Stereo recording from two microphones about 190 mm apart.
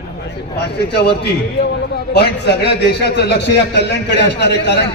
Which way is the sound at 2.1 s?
60° left (ahead or behind).